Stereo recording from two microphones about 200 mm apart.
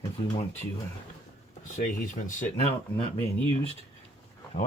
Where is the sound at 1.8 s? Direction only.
40° left (ahead or behind).